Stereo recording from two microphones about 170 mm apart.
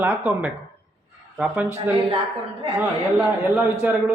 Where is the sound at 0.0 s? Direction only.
10° right (ahead or behind).